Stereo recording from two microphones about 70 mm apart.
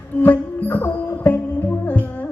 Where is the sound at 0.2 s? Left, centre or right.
Left.